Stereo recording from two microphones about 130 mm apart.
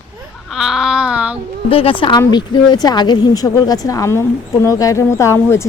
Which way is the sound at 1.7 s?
45° left (ahead or behind).